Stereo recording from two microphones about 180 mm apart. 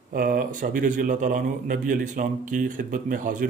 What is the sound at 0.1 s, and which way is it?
A man's voice, 50° right (ahead or behind).